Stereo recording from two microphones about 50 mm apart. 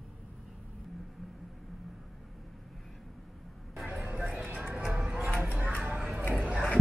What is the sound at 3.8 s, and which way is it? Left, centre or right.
Vehicle, right.